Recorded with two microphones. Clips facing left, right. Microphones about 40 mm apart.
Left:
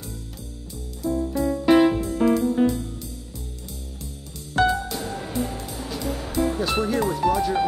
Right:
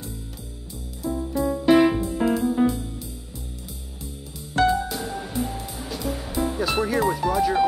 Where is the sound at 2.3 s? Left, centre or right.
Centre.